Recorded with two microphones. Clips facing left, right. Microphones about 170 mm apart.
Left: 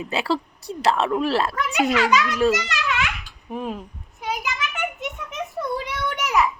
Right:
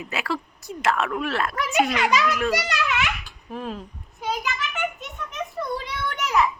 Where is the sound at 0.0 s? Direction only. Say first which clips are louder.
Left 5 dB; 30° left (ahead or behind).